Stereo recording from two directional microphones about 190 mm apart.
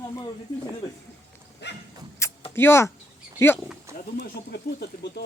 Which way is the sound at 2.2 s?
15° left (ahead or behind).